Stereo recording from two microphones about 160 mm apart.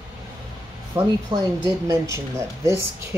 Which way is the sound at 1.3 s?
30° right (ahead or behind).